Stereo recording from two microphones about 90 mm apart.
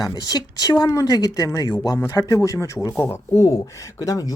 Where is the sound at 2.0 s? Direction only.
40° left (ahead or behind).